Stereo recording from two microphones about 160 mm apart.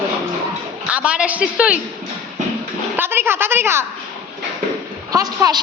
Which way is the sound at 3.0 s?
15° right (ahead or behind).